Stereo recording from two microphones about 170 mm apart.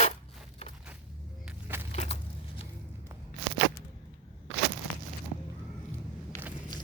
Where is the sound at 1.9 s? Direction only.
40° left (ahead or behind).